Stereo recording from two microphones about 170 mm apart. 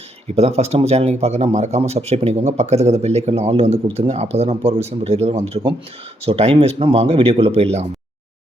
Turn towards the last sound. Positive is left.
turn(degrees=-35)  # may be behind; listen again after turning